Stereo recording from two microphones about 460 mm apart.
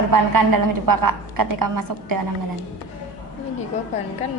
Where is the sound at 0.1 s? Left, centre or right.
Right.